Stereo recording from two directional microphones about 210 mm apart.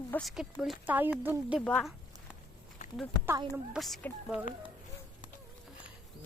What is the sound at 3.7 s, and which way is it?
Speech, centre (ahead or behind).